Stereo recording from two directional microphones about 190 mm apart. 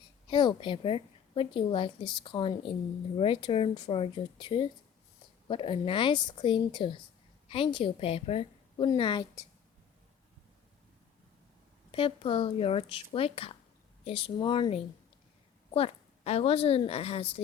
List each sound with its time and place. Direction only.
0.3 s a woman's voice: 25° left (ahead or behind)
11.9 s a woman's voice: 30° left (ahead or behind)